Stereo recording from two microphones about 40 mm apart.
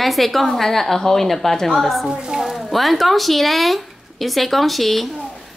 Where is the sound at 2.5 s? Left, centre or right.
Centre.